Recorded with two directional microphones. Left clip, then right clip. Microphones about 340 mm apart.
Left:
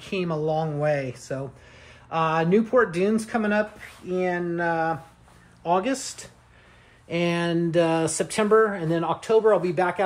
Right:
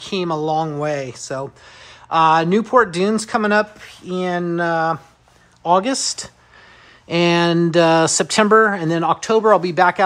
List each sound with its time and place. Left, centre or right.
0.1 s speech: right